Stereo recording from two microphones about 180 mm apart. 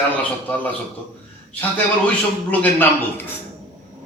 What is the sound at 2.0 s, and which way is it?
A man's voice, 10° left (ahead or behind).